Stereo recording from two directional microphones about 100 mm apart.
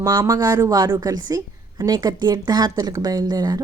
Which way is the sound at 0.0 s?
40° right (ahead or behind).